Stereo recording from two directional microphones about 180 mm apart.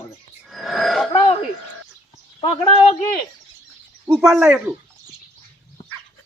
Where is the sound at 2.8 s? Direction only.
35° left (ahead or behind).